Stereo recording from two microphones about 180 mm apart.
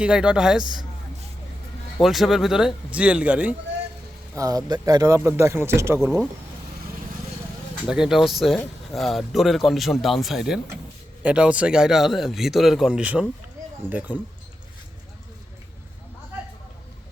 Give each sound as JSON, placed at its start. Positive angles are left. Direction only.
{"t": 0.0, "sound": "speech", "side_deg": -5}
{"t": 2.0, "sound": "speech", "side_deg": 0}
{"t": 4.4, "sound": "speech", "side_deg": -20}
{"t": 7.9, "sound": "speech", "side_deg": -5}